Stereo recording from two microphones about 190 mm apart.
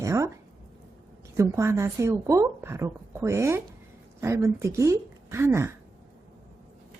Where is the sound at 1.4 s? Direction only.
15° right (ahead or behind).